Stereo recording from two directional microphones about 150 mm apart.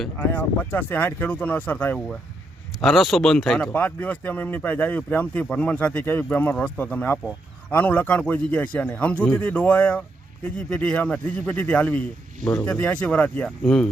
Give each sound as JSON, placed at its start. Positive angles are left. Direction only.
{"t": 0.0, "sound": "speech", "side_deg": 10}